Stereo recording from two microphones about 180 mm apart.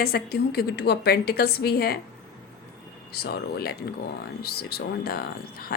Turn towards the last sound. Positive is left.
turn(degrees=55)  # may be behind; listen again after turning